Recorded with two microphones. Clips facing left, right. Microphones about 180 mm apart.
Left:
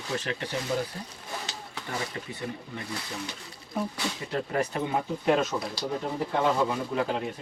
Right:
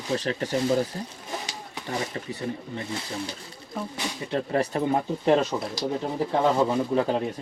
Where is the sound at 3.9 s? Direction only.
30° right (ahead or behind).